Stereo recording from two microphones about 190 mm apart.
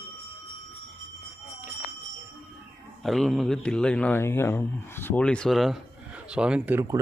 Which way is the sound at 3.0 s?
Centre (ahead or behind).